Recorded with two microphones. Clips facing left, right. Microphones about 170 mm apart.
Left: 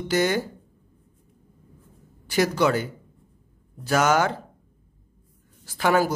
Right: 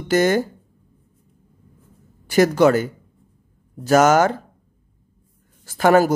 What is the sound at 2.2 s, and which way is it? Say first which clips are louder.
Speech: right 7 dB; 50° right (ahead or behind).